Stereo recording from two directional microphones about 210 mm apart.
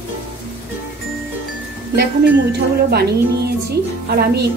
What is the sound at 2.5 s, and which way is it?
Speech, 50° right (ahead or behind).